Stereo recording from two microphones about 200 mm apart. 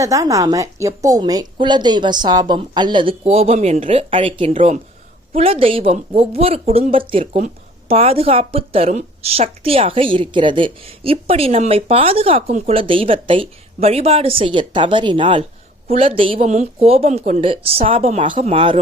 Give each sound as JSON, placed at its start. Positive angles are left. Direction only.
{"t": 0.0, "sound": "speech", "side_deg": -15}